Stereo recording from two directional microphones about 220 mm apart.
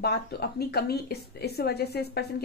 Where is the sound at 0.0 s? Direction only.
45° left (ahead or behind).